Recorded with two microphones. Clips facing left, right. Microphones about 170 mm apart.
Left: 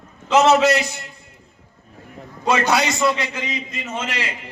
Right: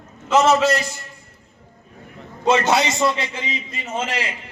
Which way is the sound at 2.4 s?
25° right (ahead or behind).